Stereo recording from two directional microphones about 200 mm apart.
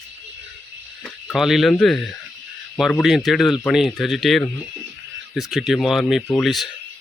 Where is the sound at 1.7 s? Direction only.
Centre (ahead or behind).